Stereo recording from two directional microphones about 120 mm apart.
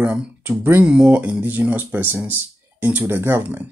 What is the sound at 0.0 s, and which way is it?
Speech, 10° right (ahead or behind).